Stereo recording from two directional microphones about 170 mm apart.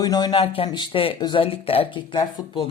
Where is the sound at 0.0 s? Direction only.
20° left (ahead or behind).